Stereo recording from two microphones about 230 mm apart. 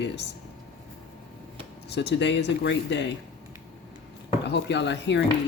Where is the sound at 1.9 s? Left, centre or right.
Left.